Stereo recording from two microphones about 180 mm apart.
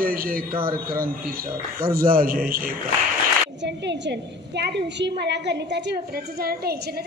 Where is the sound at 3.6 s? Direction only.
70° right (ahead or behind).